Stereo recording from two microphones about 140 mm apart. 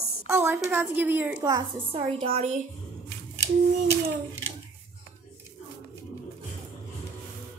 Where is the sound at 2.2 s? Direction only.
50° right (ahead or behind).